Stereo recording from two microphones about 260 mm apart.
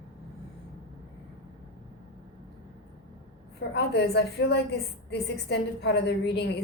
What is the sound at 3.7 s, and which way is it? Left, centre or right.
A woman's voice, left.